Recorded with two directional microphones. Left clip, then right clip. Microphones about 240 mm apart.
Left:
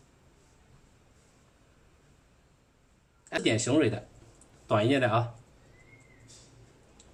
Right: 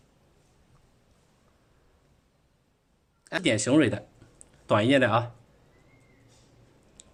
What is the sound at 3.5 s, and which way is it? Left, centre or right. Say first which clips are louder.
Speech: right 3 dB; right.